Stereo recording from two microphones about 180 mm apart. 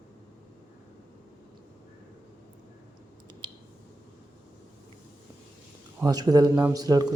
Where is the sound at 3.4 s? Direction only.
25° right (ahead or behind).